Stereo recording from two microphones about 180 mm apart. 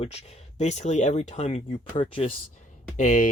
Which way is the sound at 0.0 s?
35° left (ahead or behind).